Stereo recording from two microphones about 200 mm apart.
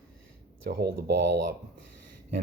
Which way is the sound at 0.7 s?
50° right (ahead or behind).